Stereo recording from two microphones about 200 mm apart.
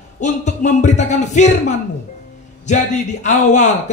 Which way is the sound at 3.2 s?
35° left (ahead or behind).